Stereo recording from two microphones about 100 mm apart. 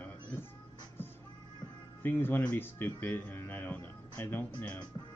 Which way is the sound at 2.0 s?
20° left (ahead or behind).